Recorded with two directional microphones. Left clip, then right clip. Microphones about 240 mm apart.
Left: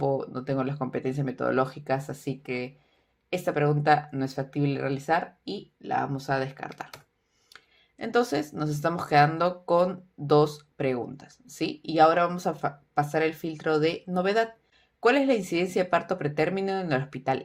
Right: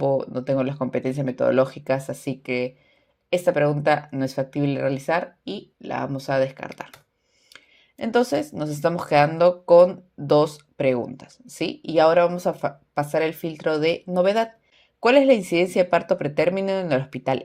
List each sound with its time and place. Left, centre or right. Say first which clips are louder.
0.0 s speech: right 6 dB; right